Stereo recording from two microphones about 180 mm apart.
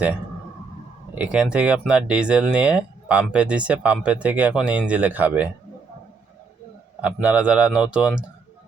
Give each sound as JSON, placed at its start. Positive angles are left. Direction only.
{"t": 1.1, "sound": "speech", "side_deg": -5}
{"t": 7.0, "sound": "speech", "side_deg": -5}